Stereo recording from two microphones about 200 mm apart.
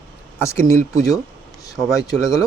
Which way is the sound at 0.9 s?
15° left (ahead or behind).